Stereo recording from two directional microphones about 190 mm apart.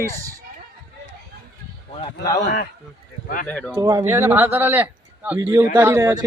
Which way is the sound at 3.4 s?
5° left (ahead or behind).